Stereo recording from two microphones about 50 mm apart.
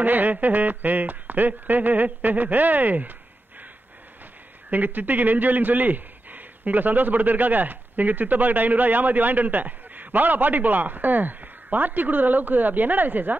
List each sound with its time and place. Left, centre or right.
0.0 s a man's voice: right
4.6 s a man's voice: right